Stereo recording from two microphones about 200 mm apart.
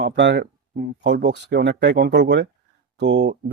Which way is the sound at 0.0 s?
60° right (ahead or behind).